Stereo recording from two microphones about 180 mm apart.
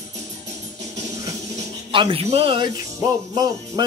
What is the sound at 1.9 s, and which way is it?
Speech, 30° right (ahead or behind).